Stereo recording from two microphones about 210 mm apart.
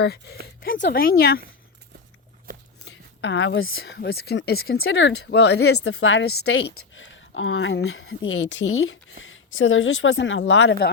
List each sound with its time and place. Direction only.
0.0 s speech: 50° left (ahead or behind)
2.5 s a sound: 40° right (ahead or behind)
2.9 s speech: 55° left (ahead or behind)
4.8 s a woman's voice: 60° left (ahead or behind)
5.7 s a woman's voice: 90° left
6.6 s a woman's voice: 60° left (ahead or behind)